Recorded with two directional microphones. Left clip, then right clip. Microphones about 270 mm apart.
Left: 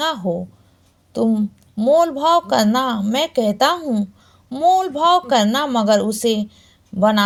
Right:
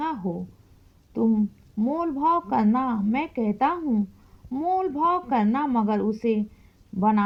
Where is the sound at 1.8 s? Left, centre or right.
Right.